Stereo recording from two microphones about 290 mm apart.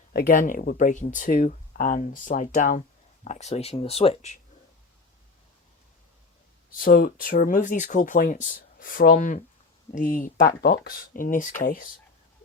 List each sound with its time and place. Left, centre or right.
0.1 s speech: left
6.7 s speech: left